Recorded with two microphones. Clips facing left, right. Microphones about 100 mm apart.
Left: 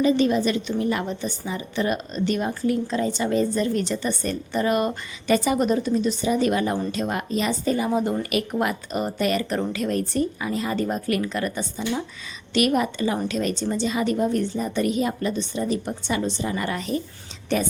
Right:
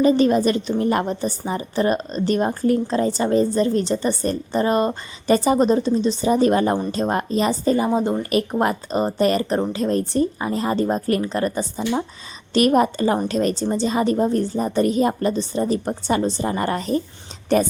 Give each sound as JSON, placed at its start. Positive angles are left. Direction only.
{"t": 0.0, "sound": "a woman's voice", "side_deg": -45}